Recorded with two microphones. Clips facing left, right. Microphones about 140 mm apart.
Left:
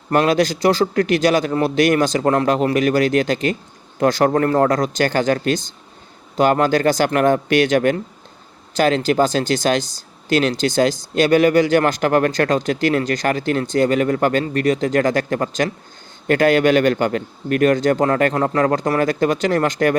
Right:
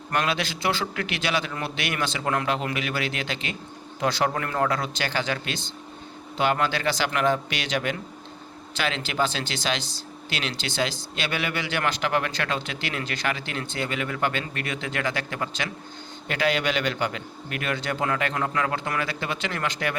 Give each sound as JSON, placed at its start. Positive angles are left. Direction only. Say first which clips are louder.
{"t": 0.1, "sound": "speech", "louder": "left 11 dB", "side_deg": 40}